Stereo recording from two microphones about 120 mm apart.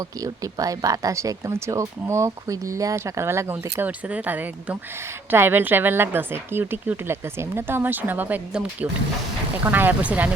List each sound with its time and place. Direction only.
0.0 s a woman's voice: 30° right (ahead or behind); by 10.3 s 10° right (ahead or behind)